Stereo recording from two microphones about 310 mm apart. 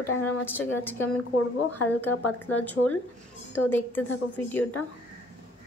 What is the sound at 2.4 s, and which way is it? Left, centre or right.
A woman's voice, centre.